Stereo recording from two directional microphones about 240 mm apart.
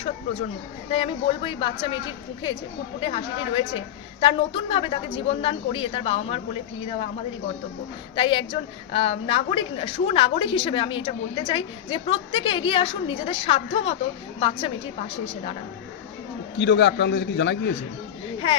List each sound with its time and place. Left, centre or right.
0.9 s a woman's voice: left
3.0 s a woman's voice: left
8.1 s a woman's voice: left
16.6 s a man's voice: left